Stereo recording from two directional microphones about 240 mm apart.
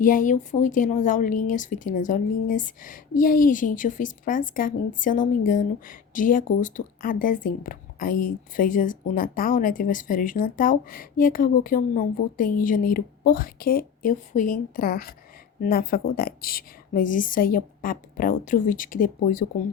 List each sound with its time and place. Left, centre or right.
0.0 s a woman's voice: left